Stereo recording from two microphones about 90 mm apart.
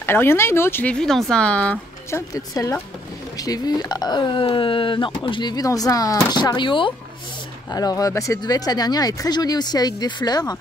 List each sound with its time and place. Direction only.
0.0 s speech: 25° left (ahead or behind)
0.9 s speech: 5° left (ahead or behind)
2.0 s a woman's voice: 35° left (ahead or behind); by 6.9 s 65° left (ahead or behind)
7.7 s a woman's voice: 40° left (ahead or behind)